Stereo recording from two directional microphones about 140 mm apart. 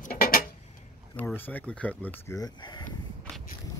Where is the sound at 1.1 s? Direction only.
15° left (ahead or behind).